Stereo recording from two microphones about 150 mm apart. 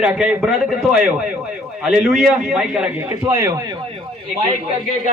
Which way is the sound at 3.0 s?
20° right (ahead or behind).